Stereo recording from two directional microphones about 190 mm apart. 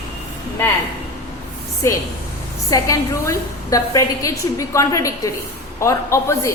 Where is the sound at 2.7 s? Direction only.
15° left (ahead or behind).